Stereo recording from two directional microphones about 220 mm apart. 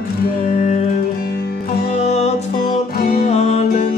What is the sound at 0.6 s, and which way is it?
Music, 35° left (ahead or behind).